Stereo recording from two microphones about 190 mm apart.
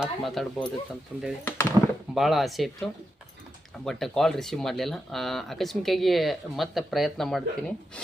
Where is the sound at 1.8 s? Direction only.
15° right (ahead or behind).